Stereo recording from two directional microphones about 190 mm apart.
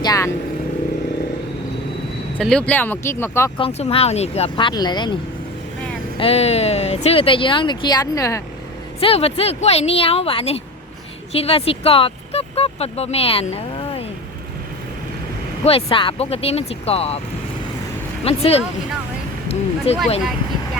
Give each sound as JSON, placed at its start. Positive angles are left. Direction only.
{"t": 0.0, "sound": "vehicle", "side_deg": 20}
{"t": 2.4, "sound": "speech", "side_deg": 5}
{"t": 3.6, "sound": "speech", "side_deg": 35}
{"t": 6.1, "sound": "speech", "side_deg": 30}
{"t": 9.0, "sound": "speech", "side_deg": 30}
{"t": 15.6, "sound": "speech", "side_deg": 30}
{"t": 18.3, "sound": "speech", "side_deg": 30}